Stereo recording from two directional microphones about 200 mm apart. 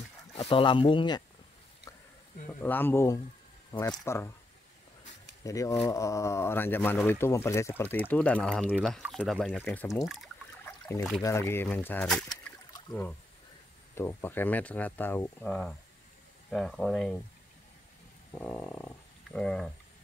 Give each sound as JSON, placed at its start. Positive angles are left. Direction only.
{"t": 0.4, "sound": "speech", "side_deg": 25}
{"t": 2.6, "sound": "speech", "side_deg": 10}
{"t": 5.4, "sound": "speech", "side_deg": 15}
{"t": 10.6, "sound": "trickle", "side_deg": 10}
{"t": 11.2, "sound": "speech", "side_deg": 15}
{"t": 13.9, "sound": "speech", "side_deg": 10}
{"t": 18.4, "sound": "wild animals", "side_deg": 5}